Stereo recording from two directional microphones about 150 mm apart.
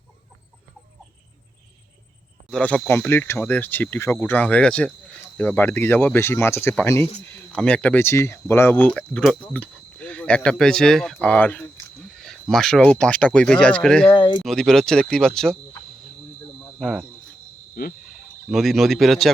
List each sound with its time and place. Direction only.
2.5 s speech: 5° left (ahead or behind)
14.1 s speech: 30° left (ahead or behind)
14.4 s speech: 5° left (ahead or behind)
16.8 s speech: centre (ahead or behind)
17.8 s fowl: 75° left (ahead or behind)
18.5 s speech: centre (ahead or behind)